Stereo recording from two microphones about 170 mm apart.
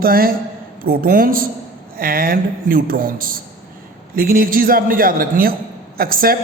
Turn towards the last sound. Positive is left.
turn(degrees=-60)  # may be behind; listen again after turning